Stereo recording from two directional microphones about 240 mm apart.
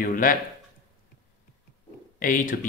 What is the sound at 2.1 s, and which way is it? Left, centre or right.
Speech, left.